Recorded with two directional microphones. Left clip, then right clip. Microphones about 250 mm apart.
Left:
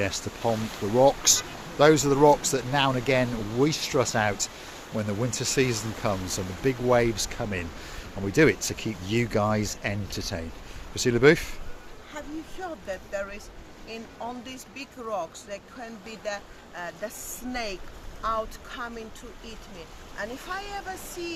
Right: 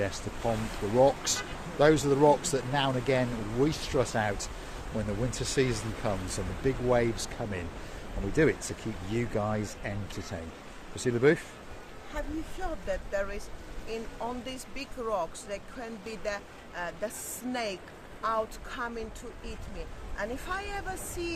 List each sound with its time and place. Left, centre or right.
0.0 s speech: left
12.6 s speech: centre
20.1 s speech: centre